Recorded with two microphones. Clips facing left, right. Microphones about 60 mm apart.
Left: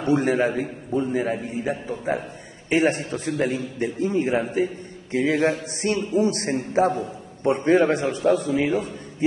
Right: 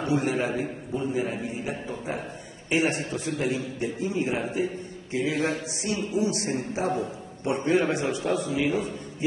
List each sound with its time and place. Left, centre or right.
0.1 s a man's voice: left